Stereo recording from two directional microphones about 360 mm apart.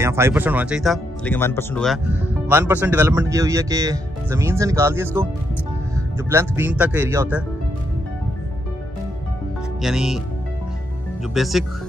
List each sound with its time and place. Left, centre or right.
0.0 s speech: centre
9.8 s speech: centre
11.3 s speech: centre